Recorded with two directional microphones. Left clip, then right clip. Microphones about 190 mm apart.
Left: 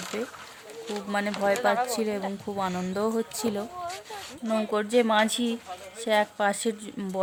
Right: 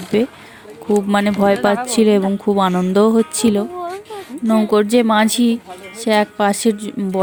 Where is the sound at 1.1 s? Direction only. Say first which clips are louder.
Right 8 dB; 35° right (ahead or behind).